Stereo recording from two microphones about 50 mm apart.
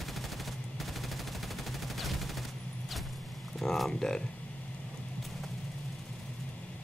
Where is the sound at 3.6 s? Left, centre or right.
Centre.